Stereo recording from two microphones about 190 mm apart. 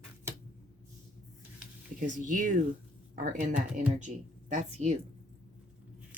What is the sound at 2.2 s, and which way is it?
Speech, 40° right (ahead or behind).